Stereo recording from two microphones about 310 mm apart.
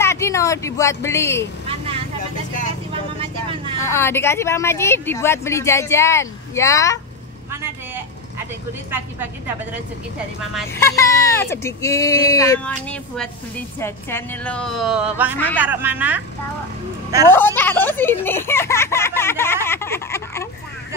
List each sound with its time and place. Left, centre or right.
0.0 s speech: centre
1.7 s vehicle: centre
3.8 s a woman's voice: centre
10.5 s a woman's voice: centre
17.3 s speech: centre